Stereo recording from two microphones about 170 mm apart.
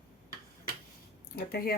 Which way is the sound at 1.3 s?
60° left (ahead or behind).